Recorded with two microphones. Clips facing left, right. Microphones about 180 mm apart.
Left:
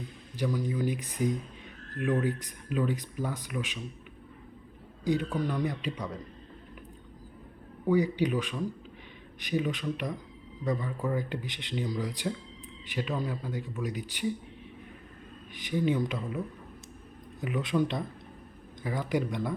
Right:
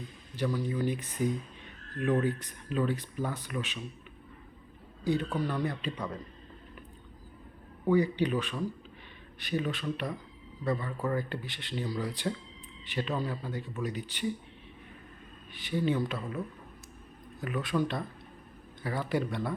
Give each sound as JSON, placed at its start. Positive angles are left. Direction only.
{"t": 0.3, "sound": "speech", "side_deg": 15}
{"t": 5.0, "sound": "speech", "side_deg": 15}
{"t": 7.9, "sound": "speech", "side_deg": 10}
{"t": 15.5, "sound": "speech", "side_deg": 15}
{"t": 17.4, "sound": "speech", "side_deg": 20}